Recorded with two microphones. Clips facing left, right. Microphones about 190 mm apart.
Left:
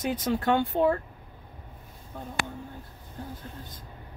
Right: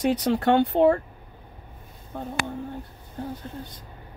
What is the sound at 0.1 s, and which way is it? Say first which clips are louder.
Speech: right 2 dB; 75° right (ahead or behind).